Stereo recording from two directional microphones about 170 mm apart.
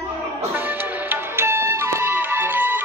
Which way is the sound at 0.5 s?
10° right (ahead or behind).